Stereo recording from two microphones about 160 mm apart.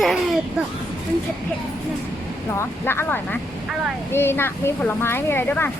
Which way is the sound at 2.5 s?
15° left (ahead or behind).